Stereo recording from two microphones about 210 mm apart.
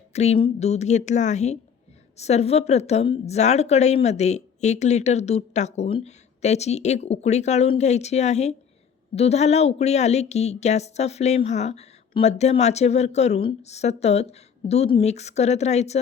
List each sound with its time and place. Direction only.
0.1 s a woman's voice: 30° left (ahead or behind)